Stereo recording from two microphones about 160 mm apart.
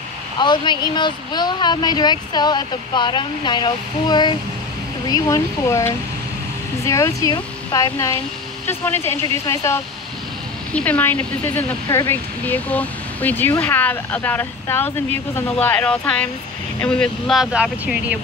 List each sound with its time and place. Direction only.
0.4 s speech: 30° left (ahead or behind); by 18.2 s 5° right (ahead or behind)